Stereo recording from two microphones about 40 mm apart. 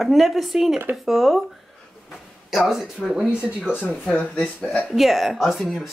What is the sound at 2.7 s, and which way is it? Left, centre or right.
Speech, centre.